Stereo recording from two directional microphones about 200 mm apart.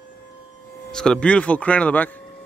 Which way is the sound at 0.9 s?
5° left (ahead or behind).